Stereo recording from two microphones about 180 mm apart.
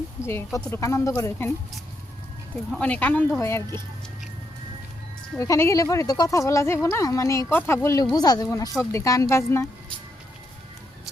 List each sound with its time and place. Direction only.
0.2 s speech: 15° left (ahead or behind)
2.7 s speech: 10° left (ahead or behind)
5.4 s speech: 15° left (ahead or behind)